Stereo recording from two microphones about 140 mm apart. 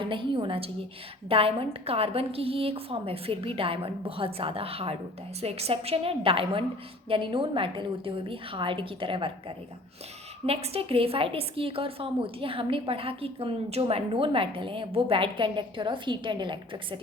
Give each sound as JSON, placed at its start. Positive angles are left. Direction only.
{"t": 0.0, "sound": "a woman's voice", "side_deg": -35}